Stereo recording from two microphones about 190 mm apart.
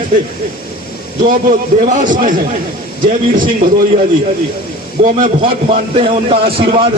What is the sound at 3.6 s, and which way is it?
Speech, 50° right (ahead or behind).